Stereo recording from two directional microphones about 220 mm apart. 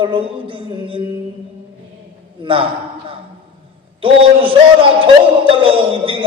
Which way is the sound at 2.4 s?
25° right (ahead or behind).